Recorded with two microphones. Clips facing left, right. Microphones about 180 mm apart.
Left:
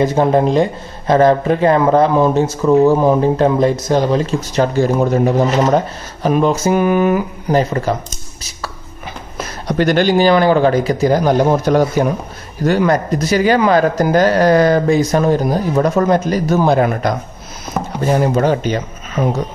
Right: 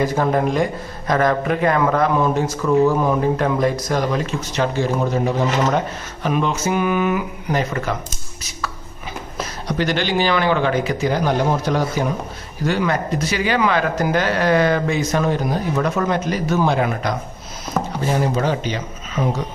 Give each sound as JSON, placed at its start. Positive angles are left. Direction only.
{"t": 0.0, "sound": "speech", "side_deg": 25}
{"t": 9.7, "sound": "speech", "side_deg": 50}